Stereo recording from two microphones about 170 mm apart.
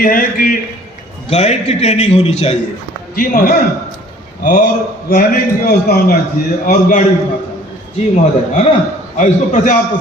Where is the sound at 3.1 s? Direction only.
55° left (ahead or behind).